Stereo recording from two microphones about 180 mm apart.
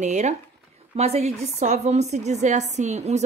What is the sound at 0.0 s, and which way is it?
A woman's voice, 40° right (ahead or behind).